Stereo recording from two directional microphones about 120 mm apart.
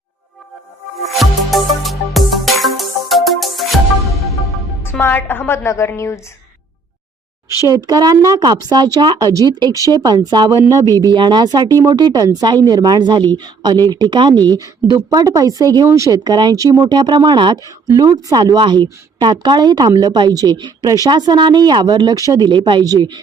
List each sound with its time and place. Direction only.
1.0 s music: centre (ahead or behind)
4.8 s a woman's voice: 20° left (ahead or behind)
7.9 s a woman's voice: 30° right (ahead or behind)